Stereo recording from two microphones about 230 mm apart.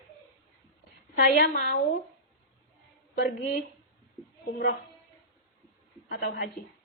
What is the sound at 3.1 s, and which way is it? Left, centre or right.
Speech, left.